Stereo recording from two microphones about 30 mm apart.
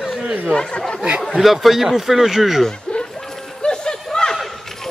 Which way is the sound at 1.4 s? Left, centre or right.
Centre.